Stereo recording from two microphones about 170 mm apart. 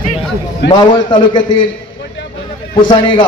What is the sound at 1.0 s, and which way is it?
Speech, 30° left (ahead or behind).